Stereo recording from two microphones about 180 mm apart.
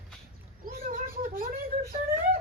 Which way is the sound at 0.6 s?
50° right (ahead or behind).